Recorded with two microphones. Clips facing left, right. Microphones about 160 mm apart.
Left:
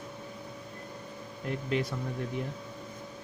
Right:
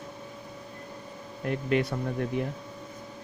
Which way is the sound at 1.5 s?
65° right (ahead or behind).